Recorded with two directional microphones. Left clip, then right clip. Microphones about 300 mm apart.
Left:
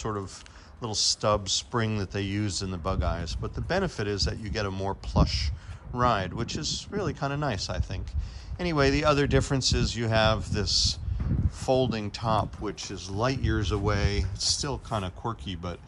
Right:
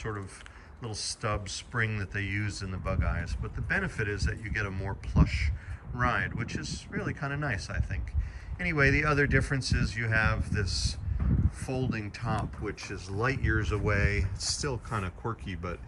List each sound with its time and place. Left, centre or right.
0.0 s speech: centre